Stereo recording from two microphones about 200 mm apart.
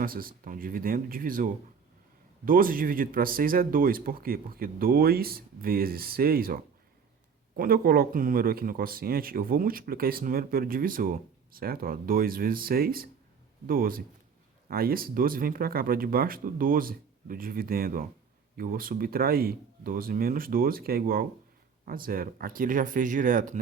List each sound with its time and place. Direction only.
0.0 s speech: 45° right (ahead or behind)